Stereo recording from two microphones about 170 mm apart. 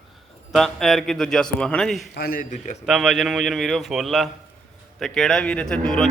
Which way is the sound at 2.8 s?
5° right (ahead or behind).